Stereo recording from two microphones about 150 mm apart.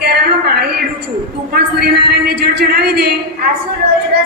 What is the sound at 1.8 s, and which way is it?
A woman's voice, 90° right.